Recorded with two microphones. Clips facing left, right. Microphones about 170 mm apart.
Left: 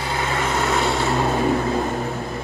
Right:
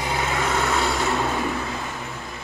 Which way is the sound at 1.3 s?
40° left (ahead or behind).